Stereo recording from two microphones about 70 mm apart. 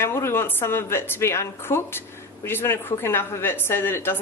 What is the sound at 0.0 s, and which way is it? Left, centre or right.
A woman's voice, left.